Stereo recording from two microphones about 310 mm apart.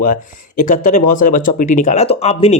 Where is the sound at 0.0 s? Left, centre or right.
Left.